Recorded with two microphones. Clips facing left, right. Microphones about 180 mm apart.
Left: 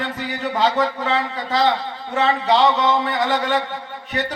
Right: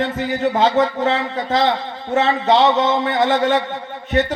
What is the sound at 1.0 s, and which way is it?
A man's voice, 45° right (ahead or behind).